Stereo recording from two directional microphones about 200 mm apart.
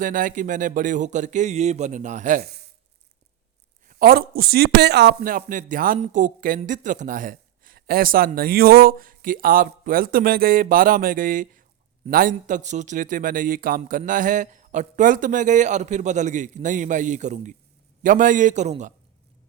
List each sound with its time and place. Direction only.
0.0 s a man's voice: 45° right (ahead or behind)
3.8 s a man's voice: 50° right (ahead or behind)